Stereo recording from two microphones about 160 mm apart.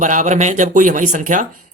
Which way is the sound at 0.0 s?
50° right (ahead or behind).